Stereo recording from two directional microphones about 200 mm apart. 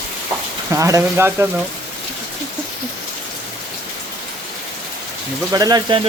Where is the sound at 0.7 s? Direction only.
15° right (ahead or behind).